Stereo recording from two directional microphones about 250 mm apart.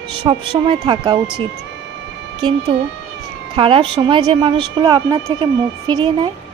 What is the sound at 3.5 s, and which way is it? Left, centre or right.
Speech, right.